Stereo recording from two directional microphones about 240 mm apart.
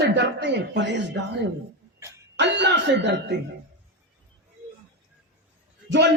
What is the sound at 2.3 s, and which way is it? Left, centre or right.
A man's voice, right.